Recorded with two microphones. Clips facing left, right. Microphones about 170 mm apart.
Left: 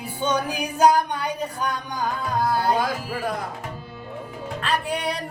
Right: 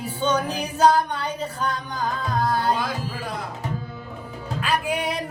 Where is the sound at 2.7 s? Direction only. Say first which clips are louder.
Left 3 dB; 45° left (ahead or behind).